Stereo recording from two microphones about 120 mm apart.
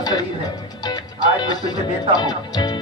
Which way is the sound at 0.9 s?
35° left (ahead or behind).